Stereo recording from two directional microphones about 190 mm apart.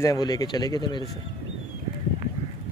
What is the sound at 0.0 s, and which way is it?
Speech, 20° left (ahead or behind).